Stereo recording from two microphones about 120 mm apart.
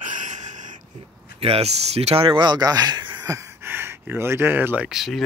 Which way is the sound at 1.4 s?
55° right (ahead or behind).